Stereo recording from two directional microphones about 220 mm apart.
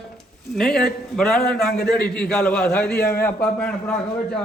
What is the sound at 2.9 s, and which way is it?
Speech, 45° left (ahead or behind).